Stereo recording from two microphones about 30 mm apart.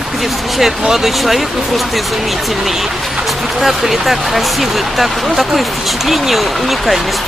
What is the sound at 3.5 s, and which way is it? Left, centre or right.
Speech, centre.